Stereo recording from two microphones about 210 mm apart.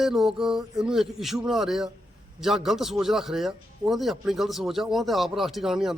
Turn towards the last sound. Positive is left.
turn(degrees=0)  # may be behind; listen again after turning